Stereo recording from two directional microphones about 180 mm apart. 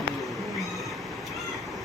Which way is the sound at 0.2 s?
Centre (ahead or behind).